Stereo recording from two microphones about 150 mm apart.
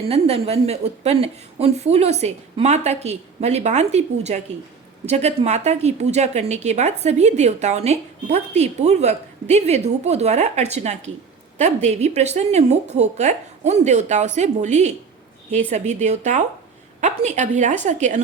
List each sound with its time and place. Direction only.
0.1 s a woman's voice: 40° right (ahead or behind)